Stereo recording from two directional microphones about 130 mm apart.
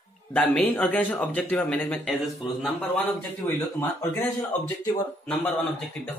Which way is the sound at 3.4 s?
15° left (ahead or behind).